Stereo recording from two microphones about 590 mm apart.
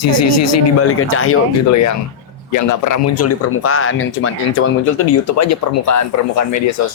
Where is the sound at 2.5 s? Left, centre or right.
Left.